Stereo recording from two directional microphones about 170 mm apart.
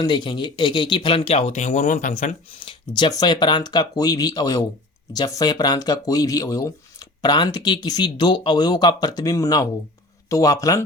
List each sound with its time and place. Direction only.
0.0 s speech: 25° left (ahead or behind); by 2.3 s 55° left (ahead or behind)
2.6 s speech: 25° left (ahead or behind)